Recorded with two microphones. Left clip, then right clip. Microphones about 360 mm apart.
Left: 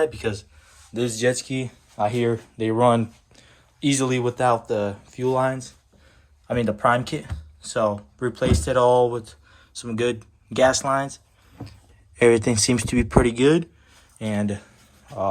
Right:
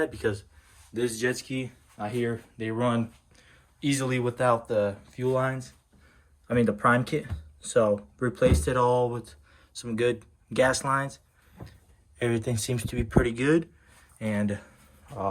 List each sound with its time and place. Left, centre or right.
0.9 s speech: centre
12.1 s speech: centre